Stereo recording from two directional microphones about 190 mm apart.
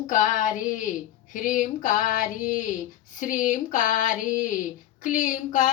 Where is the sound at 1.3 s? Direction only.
45° left (ahead or behind).